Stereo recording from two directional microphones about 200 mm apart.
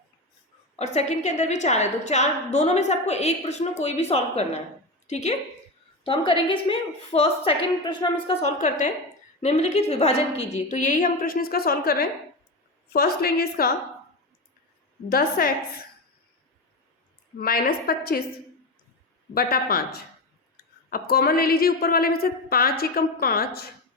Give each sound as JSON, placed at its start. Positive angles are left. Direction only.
{"t": 0.8, "sound": "a woman's voice", "side_deg": 35}
{"t": 15.1, "sound": "a woman's voice", "side_deg": 50}
{"t": 17.3, "sound": "a woman's voice", "side_deg": 50}
{"t": 19.3, "sound": "a woman's voice", "side_deg": 50}